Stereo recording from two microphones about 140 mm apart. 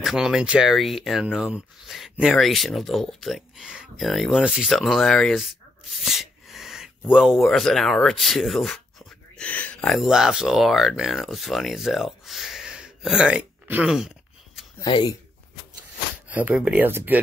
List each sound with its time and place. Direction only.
0.0 s speech: 5° right (ahead or behind)
14.9 s speech: 35° left (ahead or behind)
16.3 s speech: 10° right (ahead or behind)